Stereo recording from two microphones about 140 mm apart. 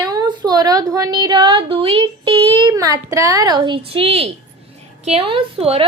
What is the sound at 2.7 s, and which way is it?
A woman's voice, 25° right (ahead or behind).